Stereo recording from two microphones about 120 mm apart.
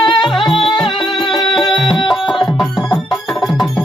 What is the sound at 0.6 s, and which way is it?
Music, 40° left (ahead or behind).